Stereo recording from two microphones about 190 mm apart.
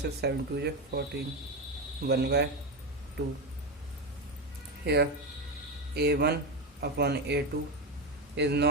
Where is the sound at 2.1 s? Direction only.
60° right (ahead or behind).